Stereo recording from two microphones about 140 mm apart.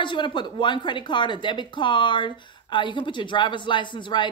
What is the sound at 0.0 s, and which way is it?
Speech, 35° left (ahead or behind).